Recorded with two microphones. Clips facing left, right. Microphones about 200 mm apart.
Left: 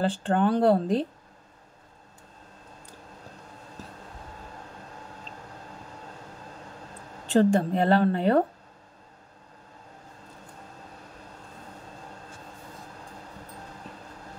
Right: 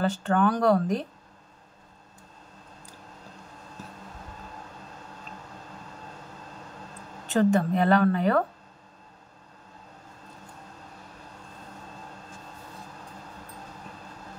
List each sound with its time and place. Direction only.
0.0 s a woman's voice: 30° left (ahead or behind)
7.3 s a woman's voice: 30° left (ahead or behind)